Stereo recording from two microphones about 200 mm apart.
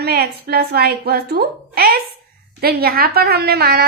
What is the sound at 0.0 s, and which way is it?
A woman's voice, 50° right (ahead or behind).